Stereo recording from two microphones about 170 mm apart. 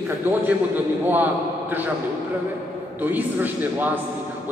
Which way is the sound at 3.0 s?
10° right (ahead or behind).